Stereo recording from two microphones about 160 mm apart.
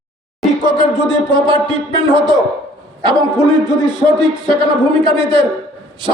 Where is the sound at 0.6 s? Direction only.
30° right (ahead or behind).